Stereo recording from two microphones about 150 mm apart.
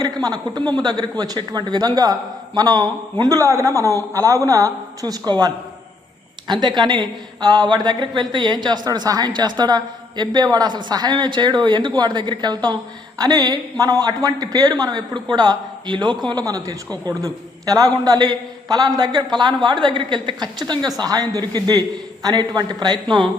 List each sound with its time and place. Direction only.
0.0 s a woman's voice: 25° right (ahead or behind)
6.5 s a woman's voice: 30° right (ahead or behind)